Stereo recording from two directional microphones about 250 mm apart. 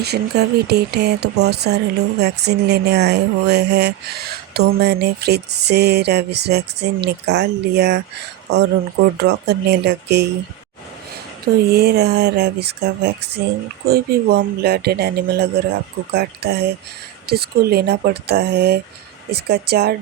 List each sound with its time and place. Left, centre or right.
0.0 s speech: right
11.7 s speech: right